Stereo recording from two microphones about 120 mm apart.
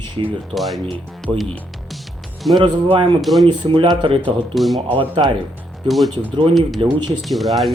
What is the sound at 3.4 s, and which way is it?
Speech, 45° right (ahead or behind).